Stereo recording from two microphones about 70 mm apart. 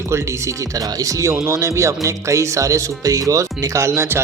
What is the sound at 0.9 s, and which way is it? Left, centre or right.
Speech, right.